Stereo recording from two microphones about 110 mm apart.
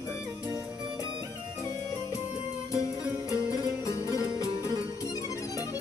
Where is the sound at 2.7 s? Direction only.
30° left (ahead or behind).